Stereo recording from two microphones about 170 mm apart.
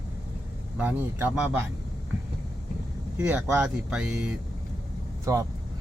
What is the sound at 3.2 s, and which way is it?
Speech, 10° right (ahead or behind).